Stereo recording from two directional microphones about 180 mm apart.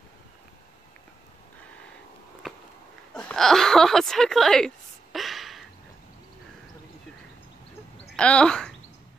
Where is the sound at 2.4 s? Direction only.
Centre (ahead or behind).